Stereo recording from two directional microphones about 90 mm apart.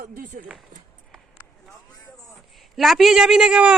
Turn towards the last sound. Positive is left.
turn(degrees=-10)  # may be behind; listen again after turning